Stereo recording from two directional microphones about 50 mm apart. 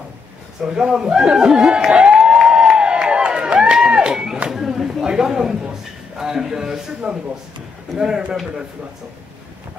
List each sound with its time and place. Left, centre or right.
0.7 s speech: centre
1.9 s a sound: centre
6.1 s speech: centre
7.9 s speech: centre